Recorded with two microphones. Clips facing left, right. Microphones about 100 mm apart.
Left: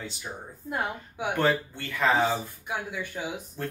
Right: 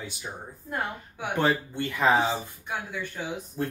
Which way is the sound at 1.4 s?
15° right (ahead or behind).